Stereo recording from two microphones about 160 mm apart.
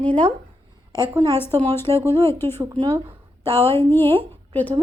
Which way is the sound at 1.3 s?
15° left (ahead or behind).